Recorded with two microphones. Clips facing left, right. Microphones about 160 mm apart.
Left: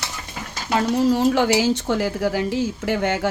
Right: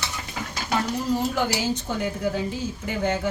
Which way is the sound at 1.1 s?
85° left.